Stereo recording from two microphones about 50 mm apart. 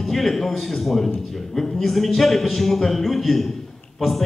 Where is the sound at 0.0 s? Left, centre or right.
Centre.